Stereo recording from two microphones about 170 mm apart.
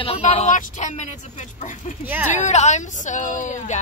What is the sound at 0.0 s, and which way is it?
A woman's voice, 35° left (ahead or behind).